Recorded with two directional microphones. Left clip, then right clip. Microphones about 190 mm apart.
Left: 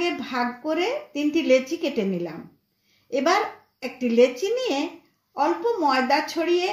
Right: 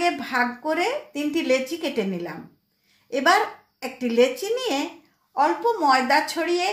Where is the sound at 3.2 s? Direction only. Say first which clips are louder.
Right 2 dB; 25° right (ahead or behind).